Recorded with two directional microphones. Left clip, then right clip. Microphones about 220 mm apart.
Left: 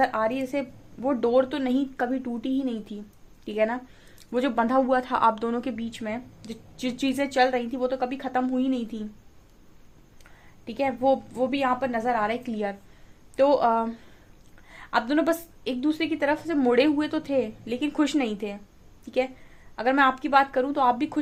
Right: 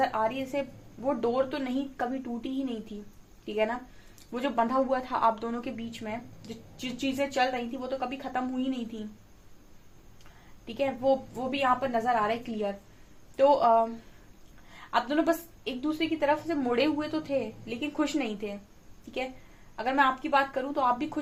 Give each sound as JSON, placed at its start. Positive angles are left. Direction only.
{"t": 0.0, "sound": "speech", "side_deg": 45}
{"t": 10.7, "sound": "speech", "side_deg": 45}